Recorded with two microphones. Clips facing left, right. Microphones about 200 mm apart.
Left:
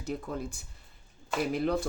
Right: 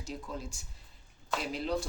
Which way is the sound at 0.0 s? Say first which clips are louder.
Left 6 dB; 55° left (ahead or behind).